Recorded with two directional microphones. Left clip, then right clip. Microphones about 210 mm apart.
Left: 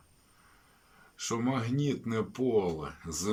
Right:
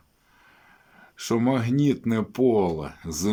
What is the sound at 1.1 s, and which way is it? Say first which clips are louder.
Speech: right 8 dB; 35° right (ahead or behind).